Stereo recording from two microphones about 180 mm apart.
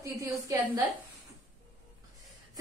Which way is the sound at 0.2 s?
20° right (ahead or behind).